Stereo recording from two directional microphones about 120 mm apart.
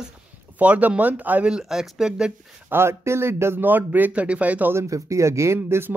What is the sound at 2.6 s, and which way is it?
Speech, 20° right (ahead or behind).